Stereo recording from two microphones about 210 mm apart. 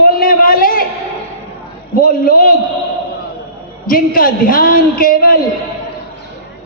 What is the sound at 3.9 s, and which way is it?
A man's voice, 40° left (ahead or behind).